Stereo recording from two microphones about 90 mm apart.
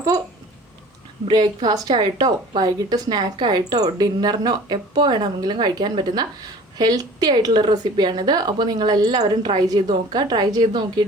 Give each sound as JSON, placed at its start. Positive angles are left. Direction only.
{"t": 1.3, "sound": "a woman's voice", "side_deg": -50}